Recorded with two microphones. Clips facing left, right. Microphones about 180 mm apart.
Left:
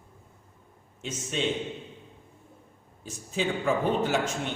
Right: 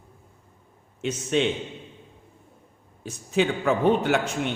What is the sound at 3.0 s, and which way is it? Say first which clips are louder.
A man's voice: right 7 dB; 70° right (ahead or behind).